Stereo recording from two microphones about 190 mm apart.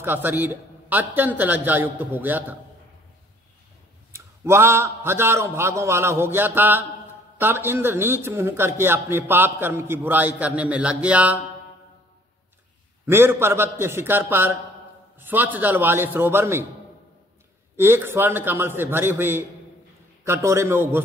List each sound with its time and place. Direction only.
0.0 s a man's voice: 10° right (ahead or behind)
4.1 s a man's voice: 15° right (ahead or behind)
13.0 s a man's voice: 10° right (ahead or behind)
17.7 s a man's voice: 10° right (ahead or behind)